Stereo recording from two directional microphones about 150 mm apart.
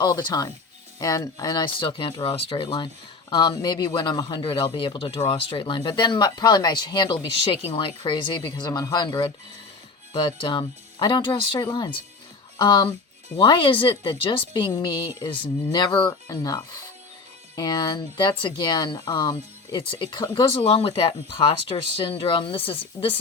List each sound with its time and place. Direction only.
0.0 s speech: 30° left (ahead or behind)
20.5 s speech: 40° left (ahead or behind)